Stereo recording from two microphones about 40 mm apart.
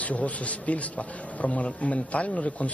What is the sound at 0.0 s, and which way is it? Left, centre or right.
A man's voice, left.